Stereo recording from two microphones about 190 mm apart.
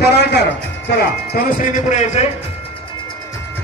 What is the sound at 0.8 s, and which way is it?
Speech, 55° left (ahead or behind).